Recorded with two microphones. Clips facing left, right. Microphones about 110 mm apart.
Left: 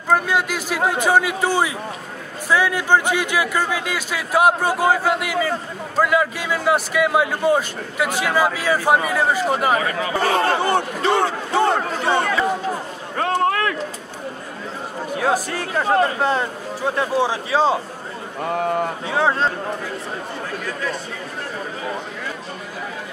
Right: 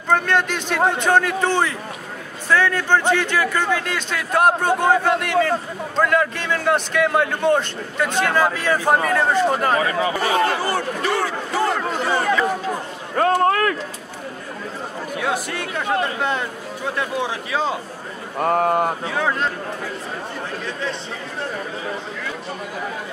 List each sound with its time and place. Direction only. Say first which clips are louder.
0.1 s a man's voice: even; 5° left (ahead or behind)
10.2 s a man's voice: left 4 dB; 30° left (ahead or behind)
13.2 s run: right 3 dB; 45° right (ahead or behind)
15.1 s speech: left 4 dB; 35° left (ahead or behind)
18.4 s speech: right 3 dB; 45° right (ahead or behind)
19.0 s speech: left 3 dB; 30° left (ahead or behind)